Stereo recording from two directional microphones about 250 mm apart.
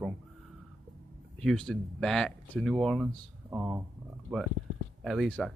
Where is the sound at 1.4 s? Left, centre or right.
Centre.